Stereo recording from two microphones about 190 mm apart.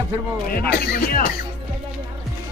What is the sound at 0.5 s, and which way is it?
Speech, 50° left (ahead or behind).